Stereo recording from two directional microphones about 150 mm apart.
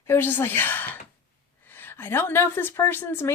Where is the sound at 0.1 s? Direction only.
15° left (ahead or behind).